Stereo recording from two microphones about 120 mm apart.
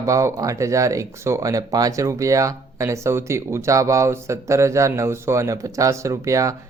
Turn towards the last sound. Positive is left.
turn(degrees=-25)  # may be behind; listen again after turning